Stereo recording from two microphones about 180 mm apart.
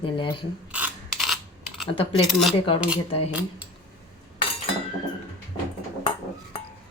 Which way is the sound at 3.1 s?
35° left (ahead or behind).